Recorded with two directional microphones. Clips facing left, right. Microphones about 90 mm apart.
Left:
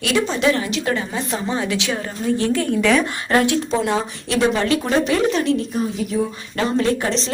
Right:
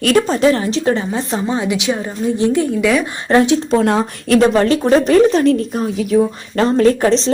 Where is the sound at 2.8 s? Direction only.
5° right (ahead or behind).